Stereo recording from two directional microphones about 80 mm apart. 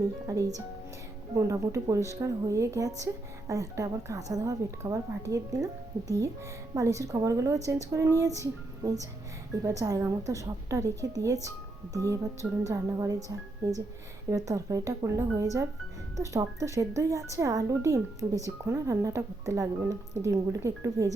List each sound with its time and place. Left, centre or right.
0.3 s a woman's voice: right